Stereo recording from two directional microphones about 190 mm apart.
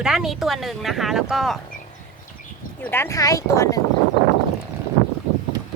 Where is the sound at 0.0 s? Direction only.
Centre (ahead or behind).